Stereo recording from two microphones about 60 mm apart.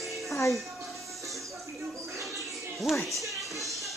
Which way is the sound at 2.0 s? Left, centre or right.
Right.